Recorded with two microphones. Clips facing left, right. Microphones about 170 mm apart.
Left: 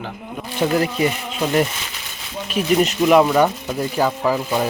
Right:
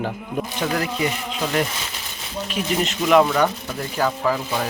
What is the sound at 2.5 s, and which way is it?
Speech, 15° left (ahead or behind).